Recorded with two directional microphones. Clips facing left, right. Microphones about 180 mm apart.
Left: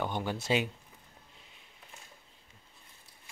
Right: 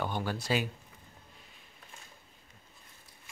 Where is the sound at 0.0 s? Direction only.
20° left (ahead or behind).